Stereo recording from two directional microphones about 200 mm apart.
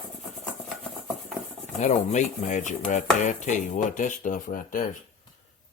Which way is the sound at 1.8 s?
35° left (ahead or behind).